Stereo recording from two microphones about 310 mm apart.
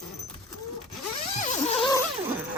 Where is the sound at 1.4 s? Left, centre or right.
Left.